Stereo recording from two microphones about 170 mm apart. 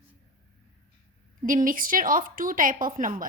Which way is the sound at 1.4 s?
55° right (ahead or behind).